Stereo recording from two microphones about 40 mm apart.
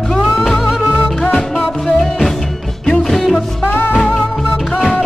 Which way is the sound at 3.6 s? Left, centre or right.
Left.